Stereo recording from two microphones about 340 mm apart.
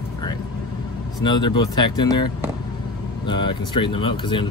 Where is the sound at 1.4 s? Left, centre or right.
Left.